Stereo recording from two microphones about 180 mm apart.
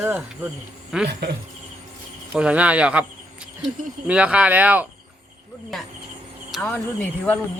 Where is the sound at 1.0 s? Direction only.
65° right (ahead or behind).